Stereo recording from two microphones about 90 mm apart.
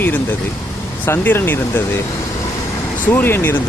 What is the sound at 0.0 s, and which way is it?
Speech, 20° left (ahead or behind).